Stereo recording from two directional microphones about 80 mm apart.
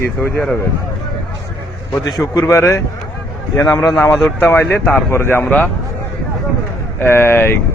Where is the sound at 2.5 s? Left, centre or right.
Left; by 5.7 s centre.